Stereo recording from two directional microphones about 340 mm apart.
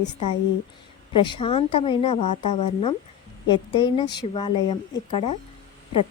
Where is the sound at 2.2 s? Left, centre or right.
Left.